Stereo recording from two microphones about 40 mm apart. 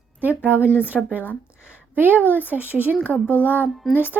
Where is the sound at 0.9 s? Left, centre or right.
Centre.